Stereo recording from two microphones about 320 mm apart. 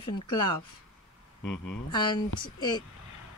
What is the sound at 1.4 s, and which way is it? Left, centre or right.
Speech, left.